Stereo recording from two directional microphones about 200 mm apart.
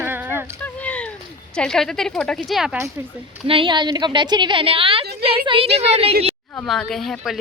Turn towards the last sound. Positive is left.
turn(degrees=0)  # may be behind; listen again after turning